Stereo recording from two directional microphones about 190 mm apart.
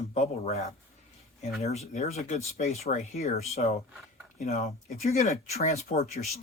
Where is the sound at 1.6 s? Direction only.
35° left (ahead or behind).